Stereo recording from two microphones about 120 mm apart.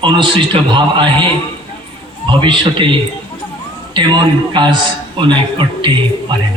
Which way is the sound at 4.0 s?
40° right (ahead or behind).